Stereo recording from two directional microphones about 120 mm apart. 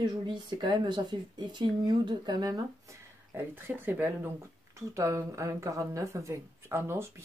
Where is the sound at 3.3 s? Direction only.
15° right (ahead or behind).